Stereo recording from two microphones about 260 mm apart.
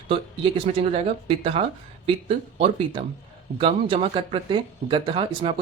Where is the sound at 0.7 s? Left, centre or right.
Right.